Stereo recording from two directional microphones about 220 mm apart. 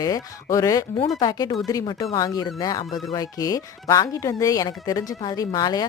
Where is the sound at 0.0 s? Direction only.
15° left (ahead or behind).